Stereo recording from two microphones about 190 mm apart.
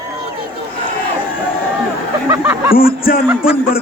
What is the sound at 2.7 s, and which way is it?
Speech, 50° left (ahead or behind).